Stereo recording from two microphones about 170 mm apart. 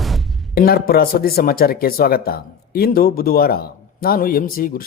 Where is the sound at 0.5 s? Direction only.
65° left (ahead or behind).